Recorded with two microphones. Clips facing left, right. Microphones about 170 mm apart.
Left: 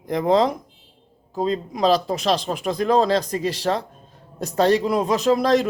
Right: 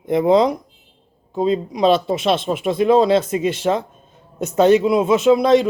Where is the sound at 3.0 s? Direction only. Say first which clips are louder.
Right 5 dB; 35° left (ahead or behind).